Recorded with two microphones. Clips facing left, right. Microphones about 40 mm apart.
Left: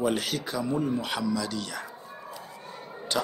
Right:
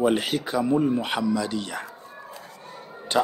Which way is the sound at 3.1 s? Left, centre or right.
Right.